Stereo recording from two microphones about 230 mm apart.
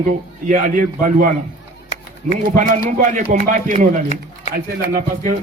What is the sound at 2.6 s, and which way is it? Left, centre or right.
A man's voice, right.